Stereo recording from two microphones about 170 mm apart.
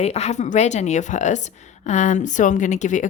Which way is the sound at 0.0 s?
40° left (ahead or behind).